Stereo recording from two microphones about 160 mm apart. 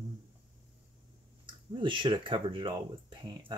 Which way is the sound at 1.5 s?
30° right (ahead or behind).